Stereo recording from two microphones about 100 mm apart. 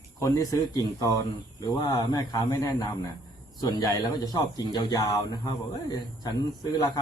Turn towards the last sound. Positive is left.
turn(degrees=45)  # may be behind; listen again after turning